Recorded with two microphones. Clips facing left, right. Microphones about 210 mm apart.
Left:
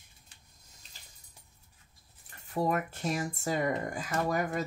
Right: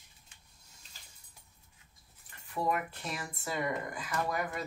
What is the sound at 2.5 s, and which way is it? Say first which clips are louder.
Speech: left 3 dB; 45° left (ahead or behind).